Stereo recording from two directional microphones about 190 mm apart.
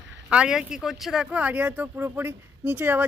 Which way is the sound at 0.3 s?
5° right (ahead or behind).